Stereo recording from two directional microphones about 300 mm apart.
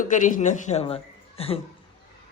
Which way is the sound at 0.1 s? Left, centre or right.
Left.